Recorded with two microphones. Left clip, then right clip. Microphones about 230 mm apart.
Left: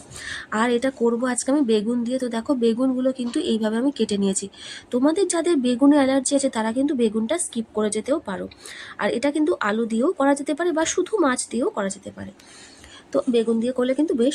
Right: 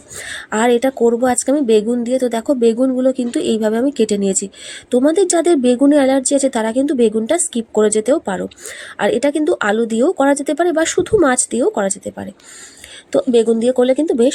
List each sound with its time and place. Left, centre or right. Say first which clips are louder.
0.2 s a woman's voice: right 6 dB; centre